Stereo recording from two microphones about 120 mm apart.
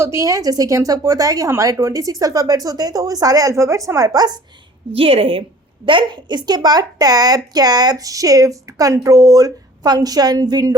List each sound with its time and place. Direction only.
0.0 s speech: 25° right (ahead or behind)
4.9 s a woman's voice: 50° right (ahead or behind); by 10.8 s 35° right (ahead or behind)